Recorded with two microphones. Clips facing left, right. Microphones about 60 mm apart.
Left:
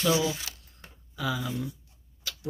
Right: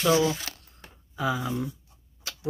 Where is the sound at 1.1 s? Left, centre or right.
Right.